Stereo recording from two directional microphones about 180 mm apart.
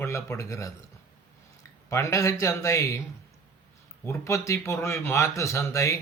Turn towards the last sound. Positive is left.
turn(degrees=15)  # may be behind; listen again after turning